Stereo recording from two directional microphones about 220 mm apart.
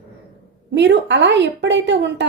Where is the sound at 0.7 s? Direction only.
55° right (ahead or behind).